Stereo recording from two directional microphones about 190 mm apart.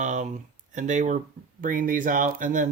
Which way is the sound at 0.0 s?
40° right (ahead or behind).